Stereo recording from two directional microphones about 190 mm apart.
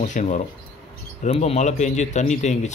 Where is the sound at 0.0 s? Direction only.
40° left (ahead or behind).